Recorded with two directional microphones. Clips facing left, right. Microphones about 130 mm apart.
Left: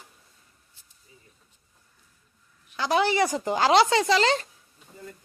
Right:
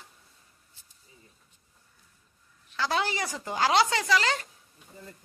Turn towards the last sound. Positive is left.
turn(degrees=25)  # may be behind; listen again after turning